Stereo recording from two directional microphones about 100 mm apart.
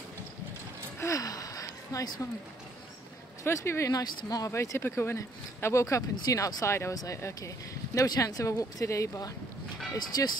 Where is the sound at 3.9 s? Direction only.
40° left (ahead or behind).